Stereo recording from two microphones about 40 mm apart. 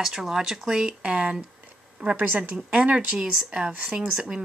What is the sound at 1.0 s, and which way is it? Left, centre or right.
Speech, right.